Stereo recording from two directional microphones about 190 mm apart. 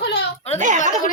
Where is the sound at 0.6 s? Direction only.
40° right (ahead or behind).